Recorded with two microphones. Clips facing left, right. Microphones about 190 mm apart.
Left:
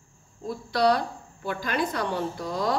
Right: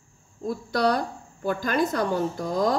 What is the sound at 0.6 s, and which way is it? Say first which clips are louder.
Speech: left 1 dB; 45° right (ahead or behind).